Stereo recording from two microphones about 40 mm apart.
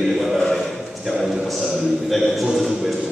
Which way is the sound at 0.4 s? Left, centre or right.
Centre.